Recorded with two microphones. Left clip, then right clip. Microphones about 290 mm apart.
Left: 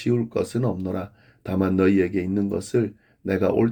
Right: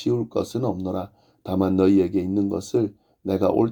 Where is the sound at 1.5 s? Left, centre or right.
Centre.